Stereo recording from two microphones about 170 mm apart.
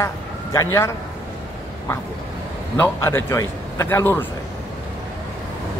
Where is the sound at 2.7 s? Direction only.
15° left (ahead or behind).